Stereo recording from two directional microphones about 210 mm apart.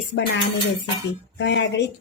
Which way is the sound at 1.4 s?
55° left (ahead or behind).